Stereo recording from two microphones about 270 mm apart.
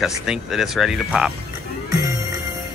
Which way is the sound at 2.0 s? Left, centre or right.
Centre.